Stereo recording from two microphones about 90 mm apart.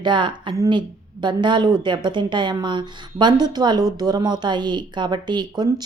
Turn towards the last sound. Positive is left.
turn(degrees=-55)  # may be behind; listen again after turning